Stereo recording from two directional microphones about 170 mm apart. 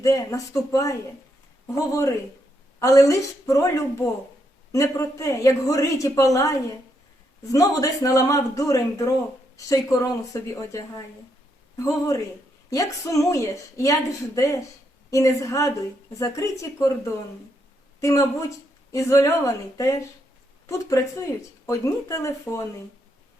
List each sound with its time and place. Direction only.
0.0 s a woman's voice: 20° left (ahead or behind)